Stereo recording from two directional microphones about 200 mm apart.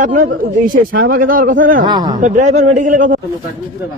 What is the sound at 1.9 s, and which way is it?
Speech, 20° right (ahead or behind).